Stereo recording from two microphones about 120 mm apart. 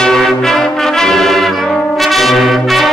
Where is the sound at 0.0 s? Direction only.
5° left (ahead or behind).